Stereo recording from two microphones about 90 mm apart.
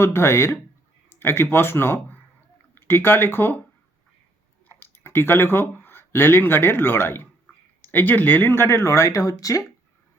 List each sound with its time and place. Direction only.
0.0 s speech: 30° left (ahead or behind)
4.8 s speech: 25° left (ahead or behind)